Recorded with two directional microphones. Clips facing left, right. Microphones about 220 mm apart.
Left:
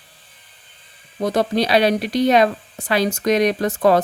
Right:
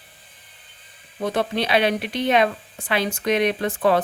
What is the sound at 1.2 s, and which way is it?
A woman's voice, 40° left (ahead or behind).